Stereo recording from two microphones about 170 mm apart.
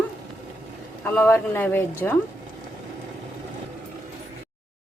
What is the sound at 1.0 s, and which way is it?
A woman's voice, 10° left (ahead or behind).